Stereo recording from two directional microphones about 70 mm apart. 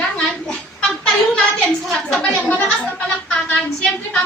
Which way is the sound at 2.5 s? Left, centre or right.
Centre.